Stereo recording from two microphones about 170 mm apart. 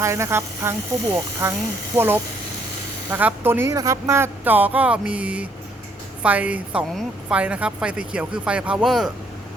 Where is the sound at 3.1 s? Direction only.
10° right (ahead or behind).